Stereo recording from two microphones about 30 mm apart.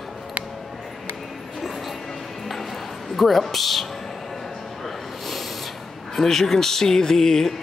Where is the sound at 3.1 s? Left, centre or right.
Centre.